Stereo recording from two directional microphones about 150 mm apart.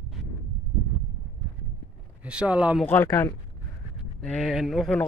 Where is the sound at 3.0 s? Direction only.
20° left (ahead or behind).